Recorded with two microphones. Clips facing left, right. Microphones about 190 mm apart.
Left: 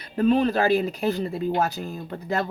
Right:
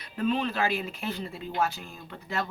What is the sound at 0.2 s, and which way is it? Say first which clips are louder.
Speech: left 7 dB; 40° left (ahead or behind).